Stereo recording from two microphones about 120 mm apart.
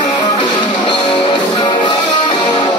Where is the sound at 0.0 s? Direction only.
40° left (ahead or behind).